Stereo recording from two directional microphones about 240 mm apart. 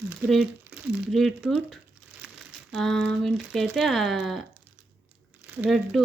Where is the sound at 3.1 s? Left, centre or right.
Centre.